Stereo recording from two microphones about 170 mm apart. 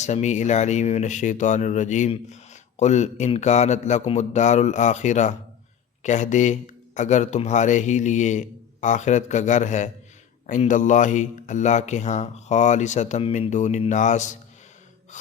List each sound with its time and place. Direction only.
0.0 s speech: 45° left (ahead or behind)